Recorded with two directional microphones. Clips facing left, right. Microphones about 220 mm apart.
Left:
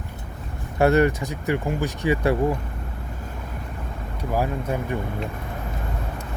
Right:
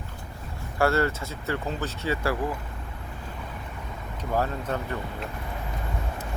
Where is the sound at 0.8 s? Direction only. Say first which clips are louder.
Left 6 dB; 20° left (ahead or behind).